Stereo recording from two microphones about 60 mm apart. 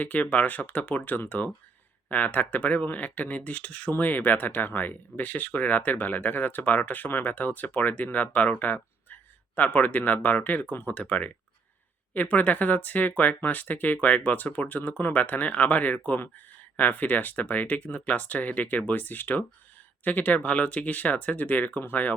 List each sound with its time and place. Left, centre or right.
0.0 s speech: left